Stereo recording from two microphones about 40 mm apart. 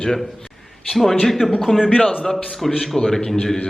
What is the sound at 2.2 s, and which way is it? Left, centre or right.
A man's voice, centre.